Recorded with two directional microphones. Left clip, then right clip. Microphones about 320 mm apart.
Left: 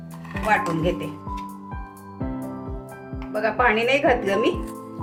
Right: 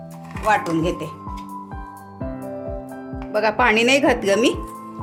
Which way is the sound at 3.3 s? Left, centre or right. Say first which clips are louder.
Right 3 dB; right.